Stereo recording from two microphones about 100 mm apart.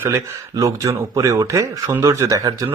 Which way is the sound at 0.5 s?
35° right (ahead or behind).